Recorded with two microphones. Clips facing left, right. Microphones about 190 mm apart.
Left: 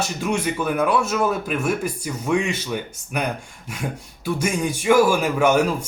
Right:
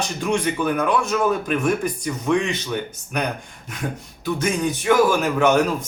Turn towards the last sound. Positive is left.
turn(degrees=10)  # may be behind; listen again after turning